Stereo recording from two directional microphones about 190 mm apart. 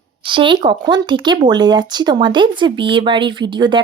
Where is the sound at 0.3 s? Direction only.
25° right (ahead or behind).